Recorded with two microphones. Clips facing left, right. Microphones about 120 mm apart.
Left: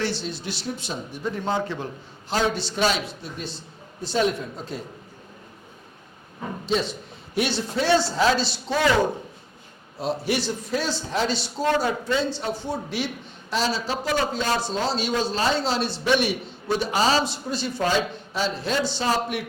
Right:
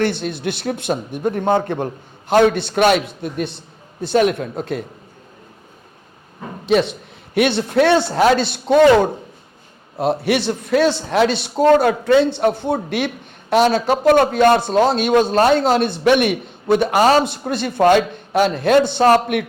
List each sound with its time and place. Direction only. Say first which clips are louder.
0.0 s a man's voice: right 8 dB; 55° right (ahead or behind)
6.7 s a man's voice: right 9 dB; 65° right (ahead or behind)